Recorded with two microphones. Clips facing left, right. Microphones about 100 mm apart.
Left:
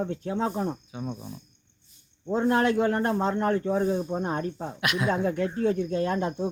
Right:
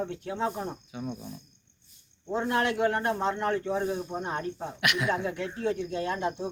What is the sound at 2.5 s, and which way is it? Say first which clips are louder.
Speech: left 3 dB; 40° left (ahead or behind).